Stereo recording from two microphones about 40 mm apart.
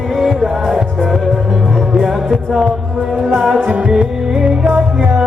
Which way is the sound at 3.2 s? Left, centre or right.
Right.